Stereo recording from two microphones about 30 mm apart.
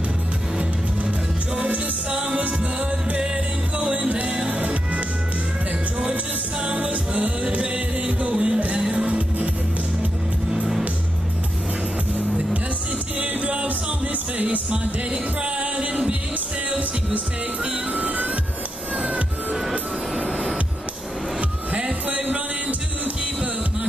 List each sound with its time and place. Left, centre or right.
1.6 s music: right
3.7 s music: right
6.7 s music: right
13.2 s music: right
15.6 s music: right
17.9 s music: right
20.2 s music: right
22.1 s music: right